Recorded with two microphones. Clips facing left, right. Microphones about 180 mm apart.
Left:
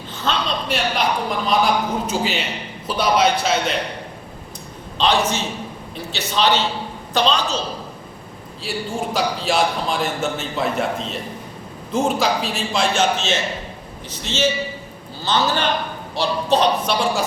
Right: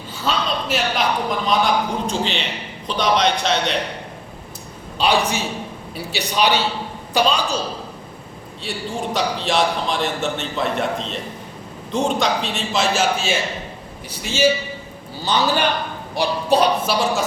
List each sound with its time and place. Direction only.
0.3 s a sound: centre (ahead or behind)
1.5 s a man's voice: 5° left (ahead or behind)
5.0 s a man's voice: 10° right (ahead or behind)
8.7 s a man's voice: centre (ahead or behind)